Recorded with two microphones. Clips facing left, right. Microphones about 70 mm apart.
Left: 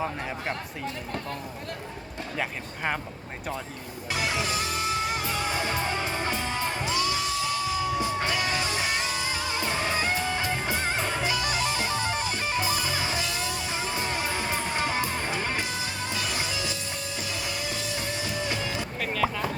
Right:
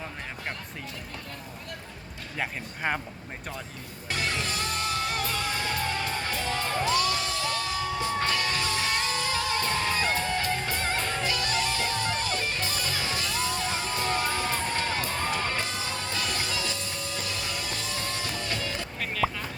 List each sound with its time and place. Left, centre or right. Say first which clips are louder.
2.4 s speech: right 1 dB; centre
4.1 s music: left 2 dB; centre
18.9 s music: left 1 dB; centre